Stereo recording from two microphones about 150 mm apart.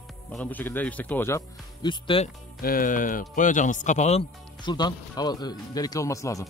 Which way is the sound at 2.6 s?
70° left (ahead or behind).